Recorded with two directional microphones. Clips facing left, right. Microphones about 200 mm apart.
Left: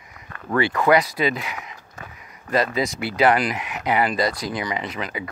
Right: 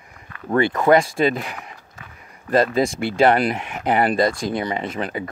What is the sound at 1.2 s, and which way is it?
Speech, 45° right (ahead or behind).